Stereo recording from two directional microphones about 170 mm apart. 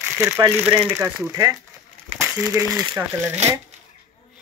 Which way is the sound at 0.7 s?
10° right (ahead or behind).